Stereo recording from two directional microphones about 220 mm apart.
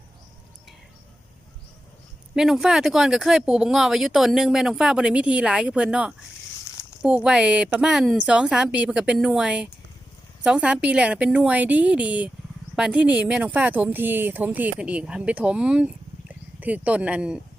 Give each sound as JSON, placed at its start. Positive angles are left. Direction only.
{"t": 2.3, "sound": "speech", "side_deg": -5}